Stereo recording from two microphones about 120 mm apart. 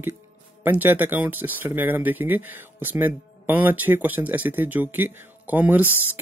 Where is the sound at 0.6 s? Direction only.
15° right (ahead or behind).